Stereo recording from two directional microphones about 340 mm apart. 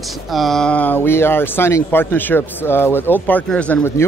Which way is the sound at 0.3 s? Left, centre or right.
Centre.